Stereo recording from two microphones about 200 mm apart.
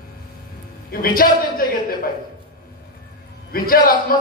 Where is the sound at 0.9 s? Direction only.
45° left (ahead or behind).